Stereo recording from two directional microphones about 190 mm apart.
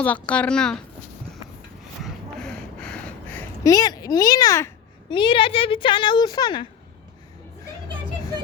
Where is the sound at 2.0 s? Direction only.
5° left (ahead or behind).